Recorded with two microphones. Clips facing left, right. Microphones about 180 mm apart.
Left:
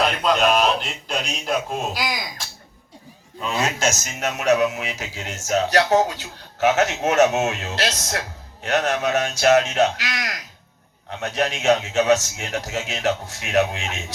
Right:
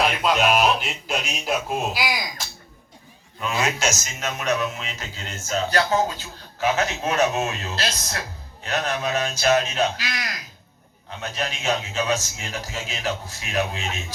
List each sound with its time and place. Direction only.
0.0 s speech: 5° right (ahead or behind)
3.6 s a man's voice: 50° left (ahead or behind); by 14.0 s 75° left (ahead or behind)